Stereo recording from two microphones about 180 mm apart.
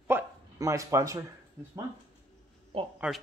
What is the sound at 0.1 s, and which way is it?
Dog, 15° right (ahead or behind).